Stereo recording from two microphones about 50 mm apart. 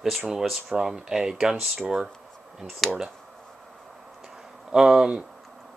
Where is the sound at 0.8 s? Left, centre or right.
Centre.